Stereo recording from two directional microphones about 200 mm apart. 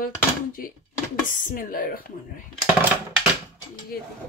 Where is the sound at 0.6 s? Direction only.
45° left (ahead or behind).